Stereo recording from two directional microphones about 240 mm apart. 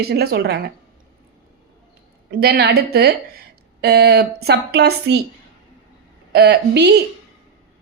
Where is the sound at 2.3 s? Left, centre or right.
Right.